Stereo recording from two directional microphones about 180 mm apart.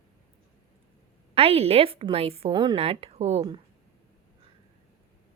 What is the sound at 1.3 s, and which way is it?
A woman's voice, 35° right (ahead or behind).